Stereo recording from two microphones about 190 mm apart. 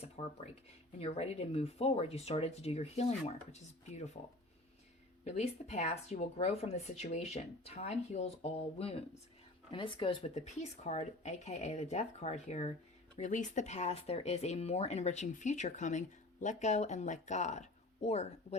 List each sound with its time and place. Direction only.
0.0 s speech: 35° left (ahead or behind)
5.2 s speech: 35° left (ahead or behind)